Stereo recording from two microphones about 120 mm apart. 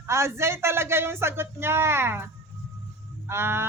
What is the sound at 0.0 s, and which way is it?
Speech, 25° right (ahead or behind).